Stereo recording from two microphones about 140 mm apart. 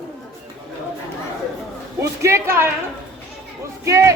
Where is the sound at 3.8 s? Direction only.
20° right (ahead or behind).